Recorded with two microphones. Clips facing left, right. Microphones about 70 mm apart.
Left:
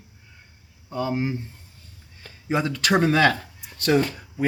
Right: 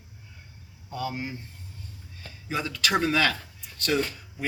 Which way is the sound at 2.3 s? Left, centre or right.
Left.